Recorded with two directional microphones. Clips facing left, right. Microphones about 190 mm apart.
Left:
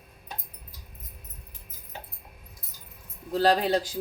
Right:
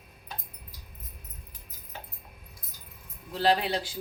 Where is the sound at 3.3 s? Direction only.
40° left (ahead or behind).